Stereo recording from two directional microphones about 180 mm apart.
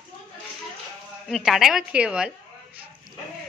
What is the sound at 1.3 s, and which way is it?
A woman's voice, centre (ahead or behind).